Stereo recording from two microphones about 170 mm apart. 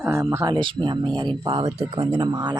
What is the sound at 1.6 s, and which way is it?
Speech, 40° right (ahead or behind).